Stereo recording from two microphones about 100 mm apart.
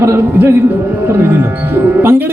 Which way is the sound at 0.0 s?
20° right (ahead or behind).